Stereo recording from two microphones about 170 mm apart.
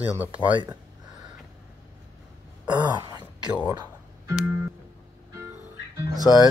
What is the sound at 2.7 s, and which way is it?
Throat clearing, 25° right (ahead or behind).